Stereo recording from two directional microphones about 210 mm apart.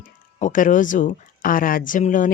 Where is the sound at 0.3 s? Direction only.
35° left (ahead or behind).